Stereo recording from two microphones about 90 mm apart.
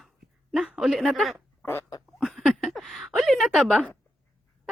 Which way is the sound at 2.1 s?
Centre (ahead or behind).